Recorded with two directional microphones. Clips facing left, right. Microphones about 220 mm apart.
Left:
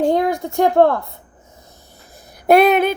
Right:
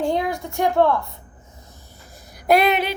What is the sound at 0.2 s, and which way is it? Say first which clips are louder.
Speech: left 6 dB; 50° left (ahead or behind).